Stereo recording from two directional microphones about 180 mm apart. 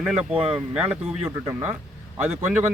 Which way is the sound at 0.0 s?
5° right (ahead or behind).